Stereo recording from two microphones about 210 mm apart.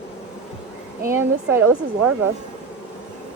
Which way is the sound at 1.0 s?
10° right (ahead or behind).